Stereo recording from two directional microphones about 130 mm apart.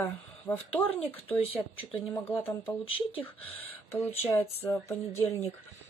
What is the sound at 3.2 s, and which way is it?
Speech, 15° left (ahead or behind).